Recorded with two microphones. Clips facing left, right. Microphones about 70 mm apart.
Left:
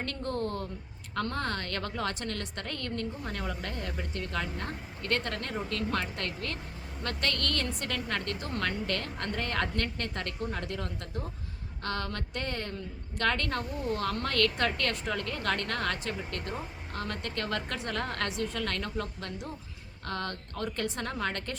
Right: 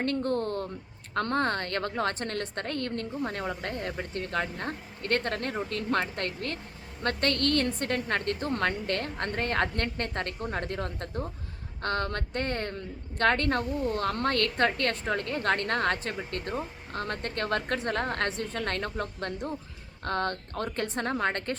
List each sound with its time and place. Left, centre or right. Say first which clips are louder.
0.0 s a woman's voice: right 5 dB; right